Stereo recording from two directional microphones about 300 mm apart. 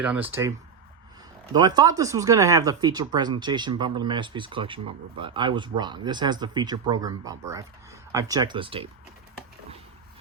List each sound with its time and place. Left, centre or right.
0.0 s speech: centre
1.5 s speech: centre